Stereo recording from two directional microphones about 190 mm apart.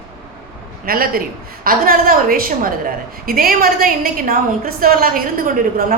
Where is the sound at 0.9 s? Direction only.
50° right (ahead or behind).